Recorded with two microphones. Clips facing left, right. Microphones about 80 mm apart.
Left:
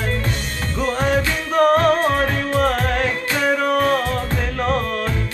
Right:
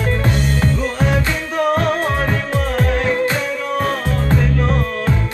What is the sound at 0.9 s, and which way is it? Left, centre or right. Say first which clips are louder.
Music: even; left.